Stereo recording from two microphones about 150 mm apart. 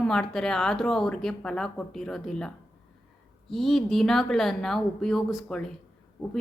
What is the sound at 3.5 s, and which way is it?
A man's voice, centre (ahead or behind).